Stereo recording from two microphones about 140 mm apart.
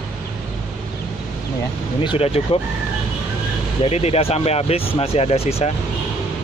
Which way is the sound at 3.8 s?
50° left (ahead or behind).